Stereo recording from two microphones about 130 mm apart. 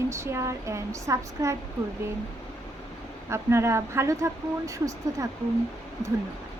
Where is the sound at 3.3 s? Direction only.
20° right (ahead or behind).